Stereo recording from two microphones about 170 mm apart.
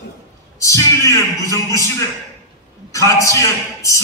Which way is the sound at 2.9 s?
20° left (ahead or behind).